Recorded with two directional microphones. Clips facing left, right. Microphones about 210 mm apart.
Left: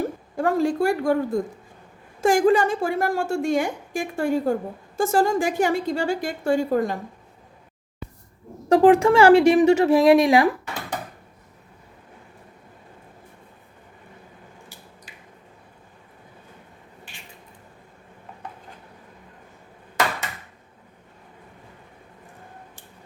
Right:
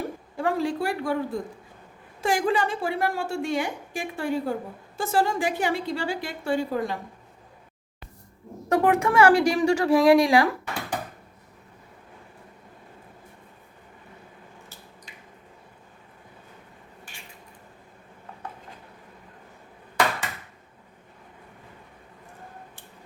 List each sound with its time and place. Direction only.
0.3 s a woman's voice: 45° left (ahead or behind)
8.7 s speech: 30° left (ahead or behind)